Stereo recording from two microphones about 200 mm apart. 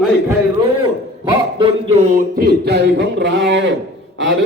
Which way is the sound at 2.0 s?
40° right (ahead or behind).